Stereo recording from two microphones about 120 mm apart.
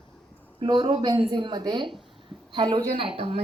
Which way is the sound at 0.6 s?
45° right (ahead or behind).